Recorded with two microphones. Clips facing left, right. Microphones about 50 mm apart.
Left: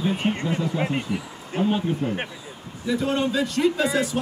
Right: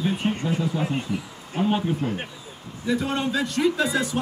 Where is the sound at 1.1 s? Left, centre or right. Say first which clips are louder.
Left 1 dB; left.